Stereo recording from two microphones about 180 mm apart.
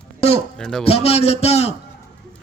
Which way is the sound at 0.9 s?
35° left (ahead or behind).